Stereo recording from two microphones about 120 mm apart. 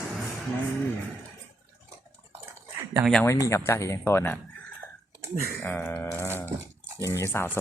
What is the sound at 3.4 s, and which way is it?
Speech, 25° left (ahead or behind).